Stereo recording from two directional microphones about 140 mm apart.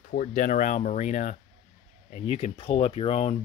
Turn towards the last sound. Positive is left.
turn(degrees=45)  # may be behind; listen again after turning